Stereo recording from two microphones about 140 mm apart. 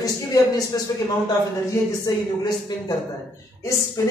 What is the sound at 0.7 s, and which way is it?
Speech, 25° left (ahead or behind).